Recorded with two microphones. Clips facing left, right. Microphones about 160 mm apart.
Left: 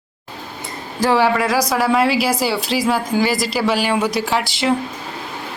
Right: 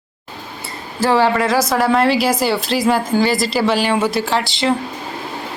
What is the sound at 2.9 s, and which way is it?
Speech, 5° right (ahead or behind).